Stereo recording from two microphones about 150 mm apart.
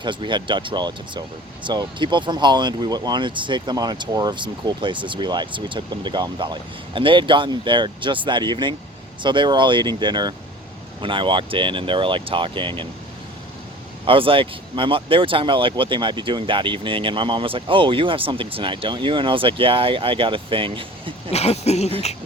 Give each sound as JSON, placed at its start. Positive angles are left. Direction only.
{"t": 0.0, "sound": "speech", "side_deg": -30}
{"t": 14.1, "sound": "speech", "side_deg": -35}
{"t": 21.2, "sound": "a sound", "side_deg": 45}